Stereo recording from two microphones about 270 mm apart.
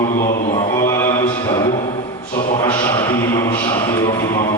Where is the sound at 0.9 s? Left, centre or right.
Centre.